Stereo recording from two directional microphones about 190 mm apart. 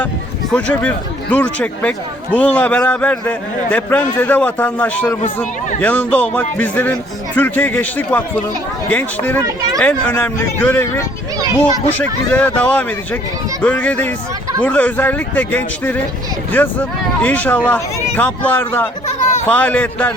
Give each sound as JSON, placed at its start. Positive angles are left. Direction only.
{"t": 0.5, "sound": "speech", "side_deg": 5}
{"t": 11.3, "sound": "a sound", "side_deg": -20}
{"t": 11.9, "sound": "speech", "side_deg": 10}